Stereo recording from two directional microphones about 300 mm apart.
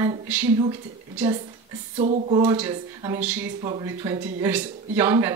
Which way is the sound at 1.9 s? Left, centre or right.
Right.